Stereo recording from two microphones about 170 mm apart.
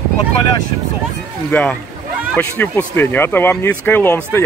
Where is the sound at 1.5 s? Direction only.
10° left (ahead or behind).